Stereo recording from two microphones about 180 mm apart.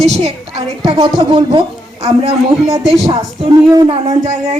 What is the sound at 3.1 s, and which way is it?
Speech, 25° right (ahead or behind).